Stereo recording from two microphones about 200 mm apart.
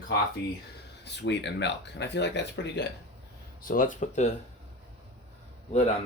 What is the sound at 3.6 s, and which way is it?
Speech, 45° left (ahead or behind).